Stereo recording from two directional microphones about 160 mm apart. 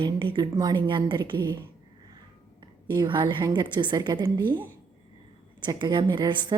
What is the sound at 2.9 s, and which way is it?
A woman's voice, 30° right (ahead or behind).